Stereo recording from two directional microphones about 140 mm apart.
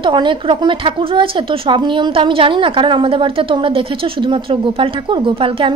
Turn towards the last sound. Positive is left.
turn(degrees=-35)  # may be behind; listen again after turning